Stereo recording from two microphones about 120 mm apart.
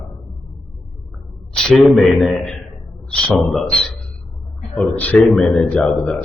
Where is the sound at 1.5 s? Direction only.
5° left (ahead or behind).